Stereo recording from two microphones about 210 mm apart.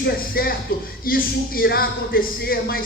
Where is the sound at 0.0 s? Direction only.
45° left (ahead or behind).